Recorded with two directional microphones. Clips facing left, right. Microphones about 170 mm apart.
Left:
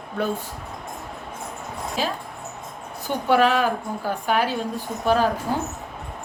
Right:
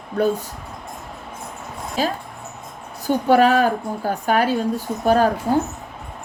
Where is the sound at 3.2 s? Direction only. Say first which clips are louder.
Right 3 dB; 40° right (ahead or behind).